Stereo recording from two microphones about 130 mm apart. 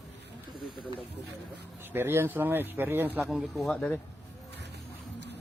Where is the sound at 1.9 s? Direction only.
20° right (ahead or behind).